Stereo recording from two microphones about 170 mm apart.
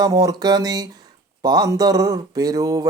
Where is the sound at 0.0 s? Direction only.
20° right (ahead or behind).